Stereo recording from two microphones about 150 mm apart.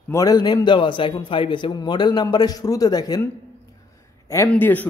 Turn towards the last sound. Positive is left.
turn(degrees=10)  # may be behind; listen again after turning